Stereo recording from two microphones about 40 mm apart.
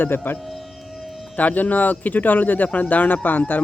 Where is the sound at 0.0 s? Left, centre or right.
Left.